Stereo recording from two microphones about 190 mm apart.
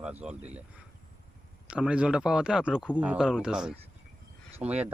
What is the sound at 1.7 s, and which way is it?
Speech, 5° right (ahead or behind).